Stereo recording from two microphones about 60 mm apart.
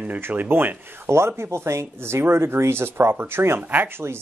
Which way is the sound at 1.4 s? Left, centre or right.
Right.